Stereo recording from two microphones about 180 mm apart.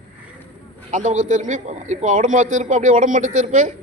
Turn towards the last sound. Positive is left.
turn(degrees=-40)  # may be behind; listen again after turning